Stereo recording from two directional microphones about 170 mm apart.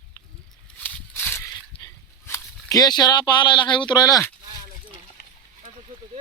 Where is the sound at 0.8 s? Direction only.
10° left (ahead or behind).